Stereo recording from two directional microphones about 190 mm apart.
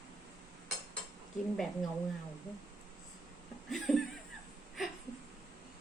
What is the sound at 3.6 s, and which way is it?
Speech, centre (ahead or behind).